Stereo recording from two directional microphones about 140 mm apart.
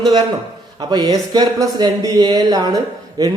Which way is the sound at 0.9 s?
30° right (ahead or behind).